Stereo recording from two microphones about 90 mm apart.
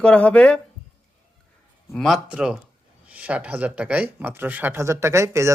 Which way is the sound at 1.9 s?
5° left (ahead or behind).